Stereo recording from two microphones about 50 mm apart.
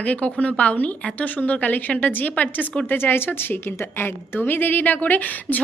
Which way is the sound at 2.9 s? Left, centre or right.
Left.